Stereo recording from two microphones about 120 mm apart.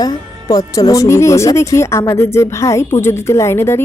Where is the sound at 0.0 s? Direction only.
30° left (ahead or behind).